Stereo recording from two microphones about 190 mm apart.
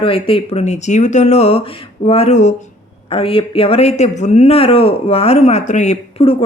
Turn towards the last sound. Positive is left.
turn(degrees=35)  # may be behind; listen again after turning